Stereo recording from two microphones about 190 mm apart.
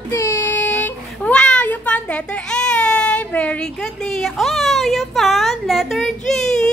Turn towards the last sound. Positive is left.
turn(degrees=0)  # may be behind; listen again after turning